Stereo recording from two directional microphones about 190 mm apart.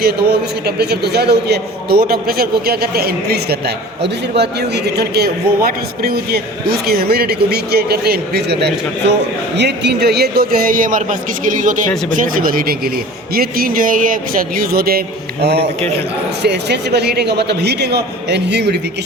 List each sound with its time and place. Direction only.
0.0 s a man's voice: 55° right (ahead or behind)